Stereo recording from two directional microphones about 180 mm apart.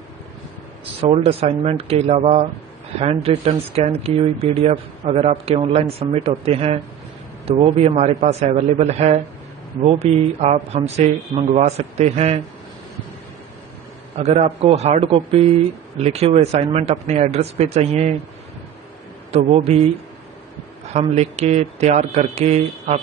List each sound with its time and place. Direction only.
1.1 s speech: 35° right (ahead or behind)
14.1 s speech: 35° right (ahead or behind)
19.3 s speech: 35° right (ahead or behind)
20.9 s speech: 35° right (ahead or behind)